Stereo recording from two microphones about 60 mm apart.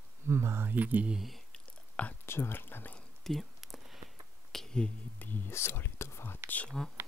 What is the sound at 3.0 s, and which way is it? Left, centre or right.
Whispering, centre.